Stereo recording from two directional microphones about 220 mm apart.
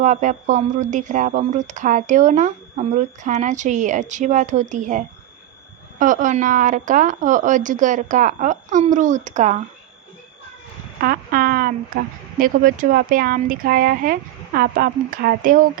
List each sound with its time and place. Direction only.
0.0 s speech: 35° right (ahead or behind)
11.0 s speech: 40° right (ahead or behind)